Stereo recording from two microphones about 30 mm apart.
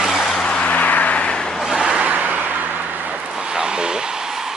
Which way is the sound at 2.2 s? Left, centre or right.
Right.